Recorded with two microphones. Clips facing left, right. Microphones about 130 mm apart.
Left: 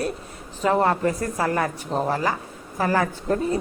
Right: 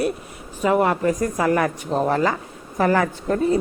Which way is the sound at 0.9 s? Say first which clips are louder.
Right 2 dB; 35° left (ahead or behind).